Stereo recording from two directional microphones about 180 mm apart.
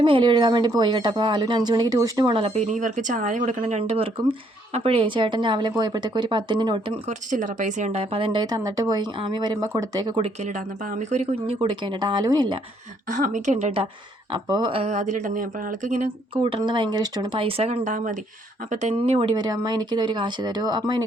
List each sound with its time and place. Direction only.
0.0 s speech: 25° right (ahead or behind)
7.3 s speech: 45° right (ahead or behind); by 10.2 s 20° right (ahead or behind)
11.1 s speech: 40° right (ahead or behind)
11.6 s speech: 25° right (ahead or behind)
13.1 s speech: 45° right (ahead or behind)
14.3 s speech: 25° right (ahead or behind); by 16.0 s 45° right (ahead or behind)
16.3 s speech: 30° right (ahead or behind)